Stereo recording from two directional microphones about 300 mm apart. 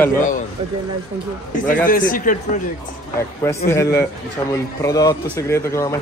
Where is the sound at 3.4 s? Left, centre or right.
Centre.